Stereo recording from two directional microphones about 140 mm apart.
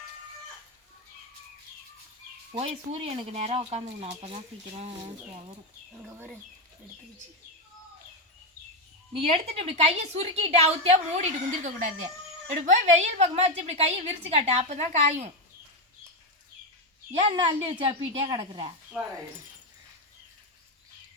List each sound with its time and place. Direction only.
2.5 s a woman's voice: 45° right (ahead or behind)
6.0 s speech: 15° right (ahead or behind)
9.1 s a woman's voice: 45° right (ahead or behind)
17.1 s speech: 55° right (ahead or behind)
17.3 s a woman's voice: 35° right (ahead or behind)